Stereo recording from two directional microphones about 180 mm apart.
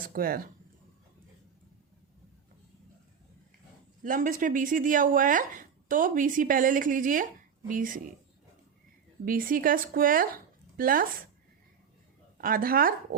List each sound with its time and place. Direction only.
0.1 s speech: 55° right (ahead or behind)
4.0 s speech: 50° right (ahead or behind)
9.2 s speech: 50° right (ahead or behind)
12.4 s speech: 50° right (ahead or behind)